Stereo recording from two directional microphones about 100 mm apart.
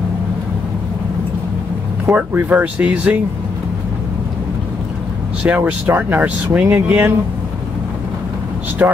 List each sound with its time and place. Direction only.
2.0 s speech: 15° right (ahead or behind)
5.4 s speech: 15° right (ahead or behind)
8.8 s speech: 20° right (ahead or behind)